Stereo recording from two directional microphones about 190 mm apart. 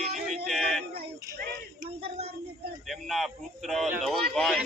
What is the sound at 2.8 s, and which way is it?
A man's voice, centre (ahead or behind).